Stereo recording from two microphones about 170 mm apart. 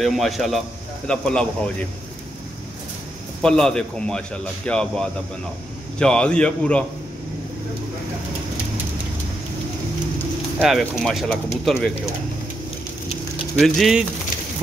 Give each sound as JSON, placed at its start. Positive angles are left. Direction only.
{"t": 0.0, "sound": "a man's voice", "side_deg": 0}
{"t": 3.4, "sound": "a man's voice", "side_deg": 5}
{"t": 10.6, "sound": "a man's voice", "side_deg": 0}
{"t": 13.6, "sound": "a man's voice", "side_deg": 0}